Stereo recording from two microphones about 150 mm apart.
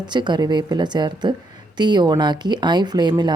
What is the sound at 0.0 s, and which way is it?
A woman's voice, 30° right (ahead or behind).